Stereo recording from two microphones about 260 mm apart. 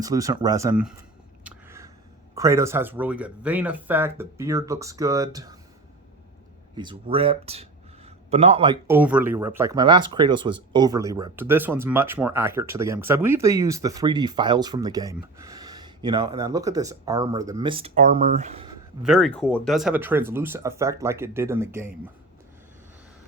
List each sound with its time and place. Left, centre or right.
0.0 s speech: centre
1.5 s a sound: centre
2.3 s speech: centre
6.7 s speech: centre
9.0 s speech: centre; by 18.7 s right
19.0 s speech: centre